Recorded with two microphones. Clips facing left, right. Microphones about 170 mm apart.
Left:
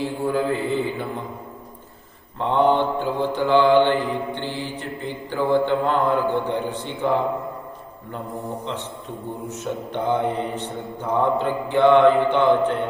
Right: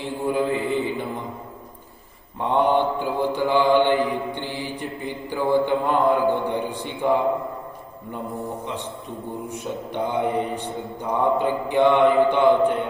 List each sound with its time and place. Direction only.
0.0 s a man's voice: 20° right (ahead or behind)
2.4 s mantra: 15° right (ahead or behind)
9.5 s mantra: 10° right (ahead or behind)